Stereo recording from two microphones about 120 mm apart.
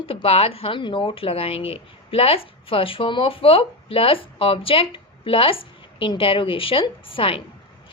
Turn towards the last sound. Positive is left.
turn(degrees=50)  # may be behind; listen again after turning